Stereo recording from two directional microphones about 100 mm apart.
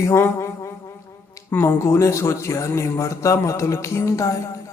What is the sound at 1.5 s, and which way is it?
Speech, 25° left (ahead or behind).